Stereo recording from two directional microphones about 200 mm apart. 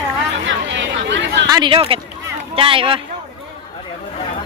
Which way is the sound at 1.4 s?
20° right (ahead or behind).